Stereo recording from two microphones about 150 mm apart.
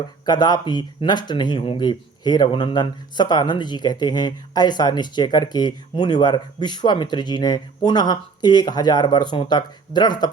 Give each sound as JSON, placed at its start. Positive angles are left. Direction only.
{"t": 0.3, "sound": "speech", "side_deg": 25}